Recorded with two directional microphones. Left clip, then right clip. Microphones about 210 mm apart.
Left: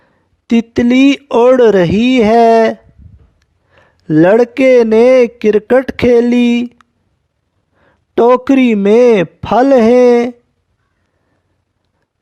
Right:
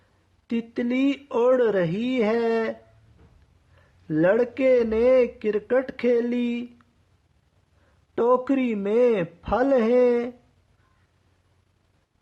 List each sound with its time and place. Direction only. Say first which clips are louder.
0.4 s speech: left 15 dB; 45° left (ahead or behind)
3.8 s speech: left 14 dB; 50° left (ahead or behind)
8.1 s speech: left 12 dB; 45° left (ahead or behind)